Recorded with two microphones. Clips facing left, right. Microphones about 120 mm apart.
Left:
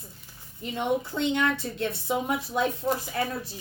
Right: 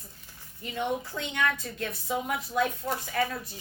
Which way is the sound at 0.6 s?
25° left (ahead or behind).